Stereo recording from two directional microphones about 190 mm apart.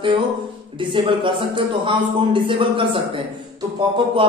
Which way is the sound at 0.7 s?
25° right (ahead or behind).